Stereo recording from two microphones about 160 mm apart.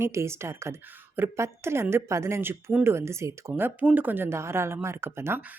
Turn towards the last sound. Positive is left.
turn(degrees=-15)  # may be behind; listen again after turning